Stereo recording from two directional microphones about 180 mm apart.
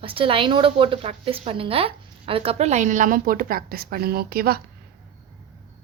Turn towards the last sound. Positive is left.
turn(degrees=-55)  # may be behind; listen again after turning